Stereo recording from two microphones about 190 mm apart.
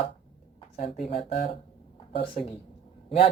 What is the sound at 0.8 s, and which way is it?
Speech, 30° left (ahead or behind).